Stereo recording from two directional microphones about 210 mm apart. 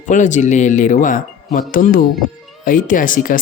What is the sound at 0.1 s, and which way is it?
Speech, 35° left (ahead or behind).